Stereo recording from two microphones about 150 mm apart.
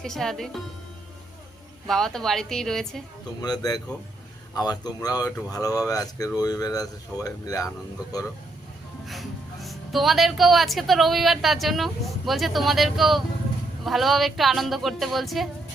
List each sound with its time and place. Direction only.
0.0 s speech: centre (ahead or behind)
1.9 s speech: centre (ahead or behind)
3.4 s speech: 25° left (ahead or behind)
9.0 s speech: centre (ahead or behind)